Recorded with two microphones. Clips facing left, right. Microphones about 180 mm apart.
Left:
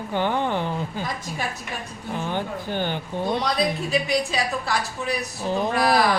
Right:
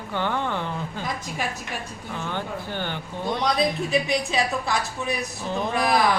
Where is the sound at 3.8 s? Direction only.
20° right (ahead or behind).